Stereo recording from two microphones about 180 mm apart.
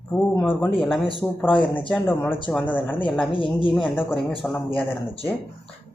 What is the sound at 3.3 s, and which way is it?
Speech, 30° left (ahead or behind).